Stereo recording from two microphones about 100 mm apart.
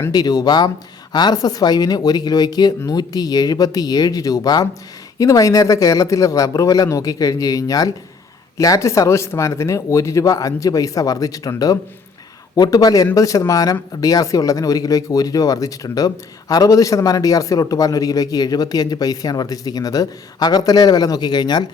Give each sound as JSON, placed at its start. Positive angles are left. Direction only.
{"t": 0.1, "sound": "speech", "side_deg": 40}